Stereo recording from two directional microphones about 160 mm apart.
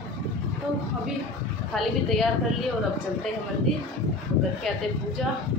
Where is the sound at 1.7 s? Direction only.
Centre (ahead or behind).